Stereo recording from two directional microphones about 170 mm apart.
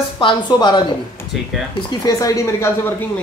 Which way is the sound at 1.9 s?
20° left (ahead or behind).